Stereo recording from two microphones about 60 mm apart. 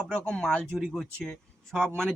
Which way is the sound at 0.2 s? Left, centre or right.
Centre.